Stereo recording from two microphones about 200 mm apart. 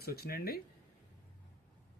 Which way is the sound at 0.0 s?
50° left (ahead or behind).